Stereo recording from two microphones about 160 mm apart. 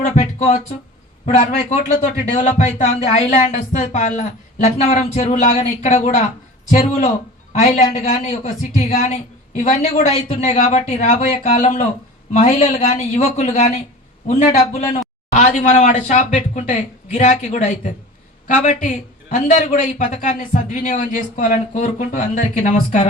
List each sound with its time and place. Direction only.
0.2 s a sound: 45° left (ahead or behind)
1.2 s a man's voice: 45° left (ahead or behind)
9.6 s a man's voice: 45° left (ahead or behind)